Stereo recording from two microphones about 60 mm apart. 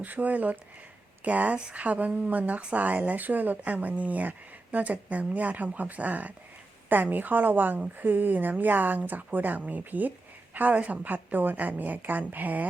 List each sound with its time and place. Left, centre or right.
0.0 s speech: right